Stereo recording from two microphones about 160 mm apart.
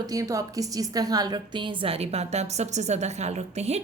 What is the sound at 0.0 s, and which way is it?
A woman's voice, 20° right (ahead or behind).